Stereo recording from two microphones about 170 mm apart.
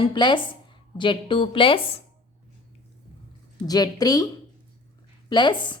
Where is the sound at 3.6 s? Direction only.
20° left (ahead or behind).